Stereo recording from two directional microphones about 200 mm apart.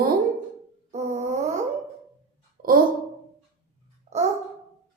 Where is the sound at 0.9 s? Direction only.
35° right (ahead or behind).